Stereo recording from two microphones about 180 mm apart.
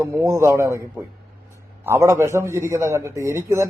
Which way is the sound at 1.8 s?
15° right (ahead or behind).